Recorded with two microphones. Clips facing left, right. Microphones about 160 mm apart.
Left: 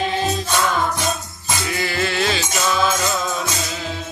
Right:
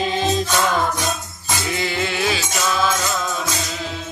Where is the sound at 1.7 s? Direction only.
20° right (ahead or behind).